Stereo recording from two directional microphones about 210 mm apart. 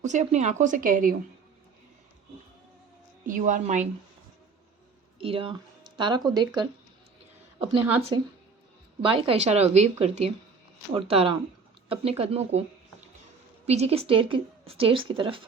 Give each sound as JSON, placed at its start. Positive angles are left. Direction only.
{"t": 0.0, "sound": "speech", "side_deg": -35}
{"t": 3.2, "sound": "speech", "side_deg": -40}
{"t": 5.2, "sound": "speech", "side_deg": -25}
{"t": 8.1, "sound": "a woman's voice", "side_deg": -20}
{"t": 13.7, "sound": "a woman's voice", "side_deg": -30}